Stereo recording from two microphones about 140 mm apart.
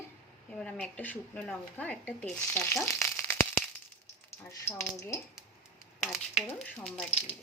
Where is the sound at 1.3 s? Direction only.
10° left (ahead or behind).